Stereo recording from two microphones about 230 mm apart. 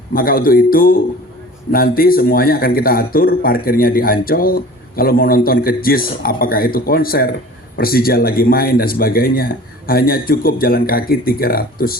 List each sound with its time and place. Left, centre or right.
0.1 s a man's voice: left